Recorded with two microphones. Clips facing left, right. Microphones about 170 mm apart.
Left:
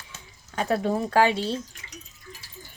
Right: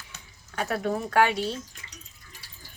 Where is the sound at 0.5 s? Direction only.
30° left (ahead or behind).